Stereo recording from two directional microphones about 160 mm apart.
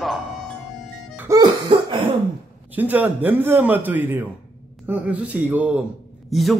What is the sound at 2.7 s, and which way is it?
A man's voice, 10° right (ahead or behind).